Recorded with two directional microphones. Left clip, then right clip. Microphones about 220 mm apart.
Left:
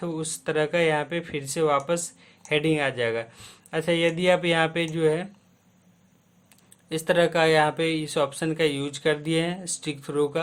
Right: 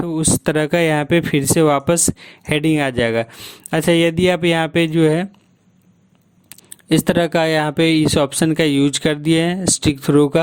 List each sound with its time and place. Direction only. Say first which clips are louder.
0.0 s speech: right 11 dB; 45° right (ahead or behind)
6.5 s speech: right 14 dB; 40° right (ahead or behind)